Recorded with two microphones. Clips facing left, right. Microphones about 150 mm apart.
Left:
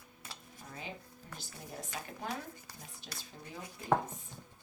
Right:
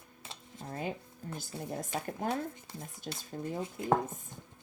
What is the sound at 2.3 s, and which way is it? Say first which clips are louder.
Speech: right 7 dB; 25° right (ahead or behind).